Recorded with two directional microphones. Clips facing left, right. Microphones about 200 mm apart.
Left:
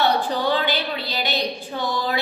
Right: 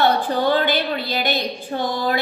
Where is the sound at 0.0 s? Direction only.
50° right (ahead or behind).